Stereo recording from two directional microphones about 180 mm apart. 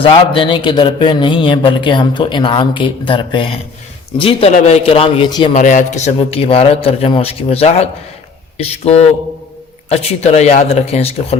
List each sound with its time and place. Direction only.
0.0 s a man's voice: 30° left (ahead or behind)
5.5 s a man's voice: 45° left (ahead or behind)